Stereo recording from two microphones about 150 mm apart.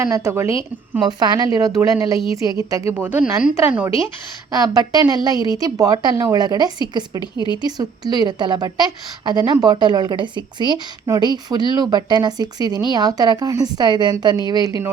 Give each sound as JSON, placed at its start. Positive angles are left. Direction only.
{"t": 0.0, "sound": "a woman's voice", "side_deg": -20}
{"t": 4.5, "sound": "a woman's voice", "side_deg": -25}
{"t": 7.2, "sound": "speech", "side_deg": 30}
{"t": 7.6, "sound": "a woman's voice", "side_deg": -25}